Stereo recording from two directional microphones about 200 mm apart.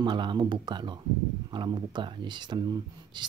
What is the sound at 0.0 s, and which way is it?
Speech, 25° right (ahead or behind).